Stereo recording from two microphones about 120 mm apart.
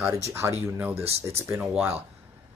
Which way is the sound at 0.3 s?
20° right (ahead or behind).